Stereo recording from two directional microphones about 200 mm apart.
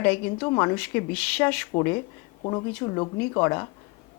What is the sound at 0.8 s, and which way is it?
Speech, 10° left (ahead or behind).